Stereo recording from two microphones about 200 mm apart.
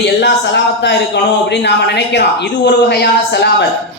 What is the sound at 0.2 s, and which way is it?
Speech, 60° left (ahead or behind).